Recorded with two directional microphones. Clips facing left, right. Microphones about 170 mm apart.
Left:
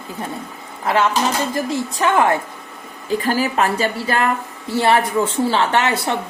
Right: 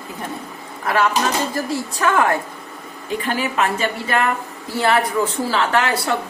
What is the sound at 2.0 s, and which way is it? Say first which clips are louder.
Speech: left 1 dB; 20° left (ahead or behind).